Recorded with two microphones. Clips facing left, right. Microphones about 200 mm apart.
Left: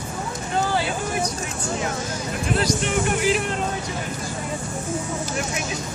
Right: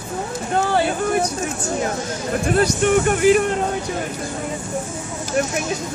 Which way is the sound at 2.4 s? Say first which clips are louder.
Right 6 dB; 50° right (ahead or behind).